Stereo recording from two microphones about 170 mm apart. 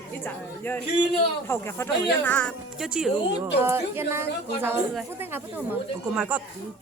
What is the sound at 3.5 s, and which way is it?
A woman's voice, 15° right (ahead or behind).